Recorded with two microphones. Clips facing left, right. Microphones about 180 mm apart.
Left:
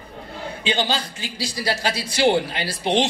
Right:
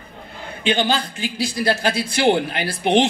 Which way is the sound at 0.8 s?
55° right (ahead or behind).